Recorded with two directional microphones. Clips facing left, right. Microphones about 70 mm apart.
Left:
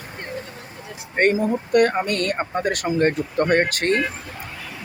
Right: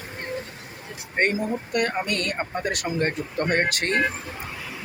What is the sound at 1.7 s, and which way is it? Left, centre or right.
Speech, left.